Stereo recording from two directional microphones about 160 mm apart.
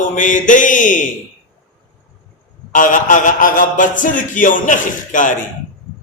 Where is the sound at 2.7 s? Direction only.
55° left (ahead or behind).